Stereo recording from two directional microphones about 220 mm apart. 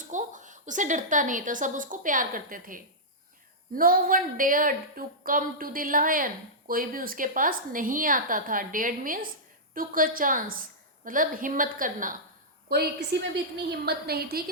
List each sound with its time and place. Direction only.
0.1 s a woman's voice: 35° right (ahead or behind)